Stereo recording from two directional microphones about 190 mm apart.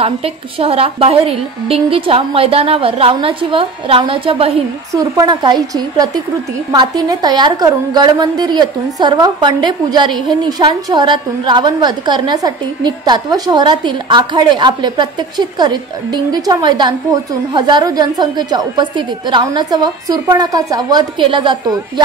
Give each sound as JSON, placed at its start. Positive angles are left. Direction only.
{"t": 0.0, "sound": "a woman's voice", "side_deg": -30}